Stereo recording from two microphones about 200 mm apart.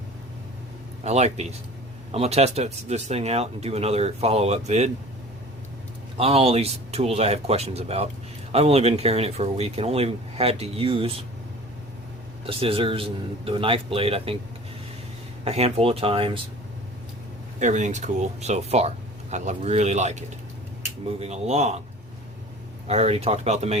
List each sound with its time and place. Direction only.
1.0 s speech: 35° right (ahead or behind)
6.1 s speech: 30° right (ahead or behind)
12.5 s a man's voice: 25° right (ahead or behind)
15.4 s a man's voice: 30° right (ahead or behind)
17.6 s speech: 40° right (ahead or behind)
22.9 s speech: 30° right (ahead or behind)